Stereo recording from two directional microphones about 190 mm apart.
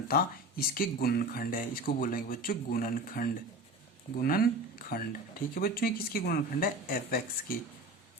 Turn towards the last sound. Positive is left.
turn(degrees=50)  # may be behind; listen again after turning